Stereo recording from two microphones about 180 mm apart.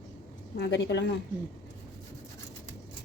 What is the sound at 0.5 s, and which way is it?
Sizzle, 70° left (ahead or behind).